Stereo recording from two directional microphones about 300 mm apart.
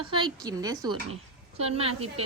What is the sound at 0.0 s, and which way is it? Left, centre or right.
A woman's voice, centre.